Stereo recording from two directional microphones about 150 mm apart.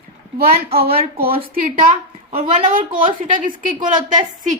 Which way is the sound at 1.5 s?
70° right (ahead or behind).